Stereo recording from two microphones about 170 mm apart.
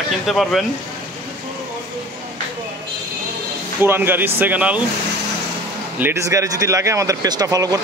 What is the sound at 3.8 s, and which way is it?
Speech, 15° right (ahead or behind).